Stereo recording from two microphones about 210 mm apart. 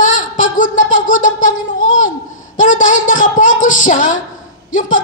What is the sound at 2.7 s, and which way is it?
Speech, 40° left (ahead or behind).